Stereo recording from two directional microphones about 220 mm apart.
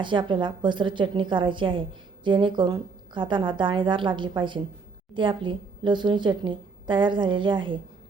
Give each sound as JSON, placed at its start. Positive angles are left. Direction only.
{"t": 0.0, "sound": "a woman's voice", "side_deg": -20}